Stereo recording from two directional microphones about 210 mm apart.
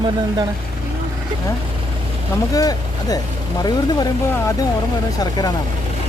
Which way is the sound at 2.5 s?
15° left (ahead or behind).